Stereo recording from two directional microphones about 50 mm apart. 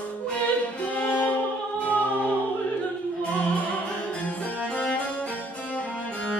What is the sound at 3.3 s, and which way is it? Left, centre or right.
Music, left.